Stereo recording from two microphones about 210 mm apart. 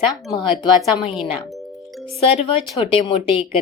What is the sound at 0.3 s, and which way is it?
Speech, 20° left (ahead or behind).